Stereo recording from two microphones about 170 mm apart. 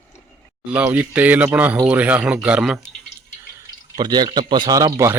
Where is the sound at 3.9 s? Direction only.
25° right (ahead or behind).